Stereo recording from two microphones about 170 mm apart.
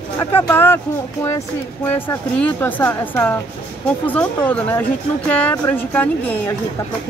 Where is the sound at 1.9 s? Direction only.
10° left (ahead or behind).